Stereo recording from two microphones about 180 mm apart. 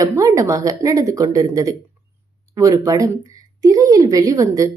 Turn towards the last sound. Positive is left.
turn(degrees=-20)  # may be behind; listen again after turning